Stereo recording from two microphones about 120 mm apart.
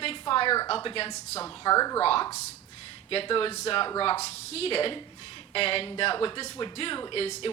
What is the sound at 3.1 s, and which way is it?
Speech, 50° left (ahead or behind).